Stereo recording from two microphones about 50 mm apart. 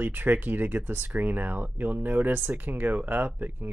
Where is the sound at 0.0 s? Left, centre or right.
Right.